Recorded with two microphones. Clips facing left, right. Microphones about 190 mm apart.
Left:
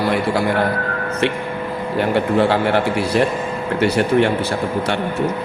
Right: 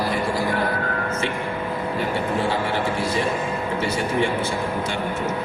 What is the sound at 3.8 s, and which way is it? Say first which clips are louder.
Speech: left 9 dB; 70° left (ahead or behind).